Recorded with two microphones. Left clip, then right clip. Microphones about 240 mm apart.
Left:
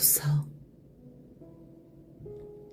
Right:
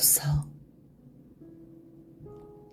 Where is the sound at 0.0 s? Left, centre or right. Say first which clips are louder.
Right 2 dB; right.